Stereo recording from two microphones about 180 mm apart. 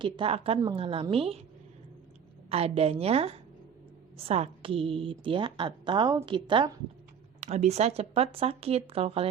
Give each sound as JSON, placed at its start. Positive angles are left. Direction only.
{"t": 0.0, "sound": "speech", "side_deg": -30}
{"t": 2.5, "sound": "a woman's voice", "side_deg": -35}
{"t": 7.4, "sound": "speech", "side_deg": -40}